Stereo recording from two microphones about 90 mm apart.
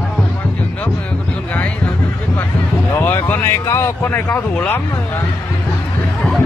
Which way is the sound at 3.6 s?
30° left (ahead or behind).